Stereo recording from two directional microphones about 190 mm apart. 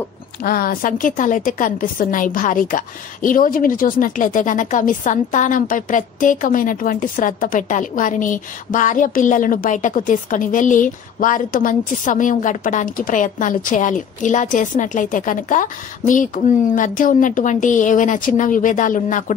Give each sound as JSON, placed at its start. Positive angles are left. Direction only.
{"t": 0.4, "sound": "a woman's voice", "side_deg": 50}